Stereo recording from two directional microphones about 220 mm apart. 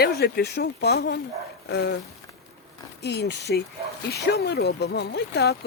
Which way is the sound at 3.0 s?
50° left (ahead or behind).